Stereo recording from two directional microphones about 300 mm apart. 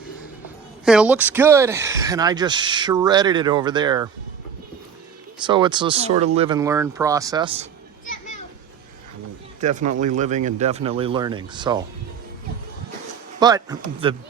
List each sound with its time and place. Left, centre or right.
0.9 s speech: centre
5.5 s speech: centre
9.6 s speech: right
13.4 s speech: centre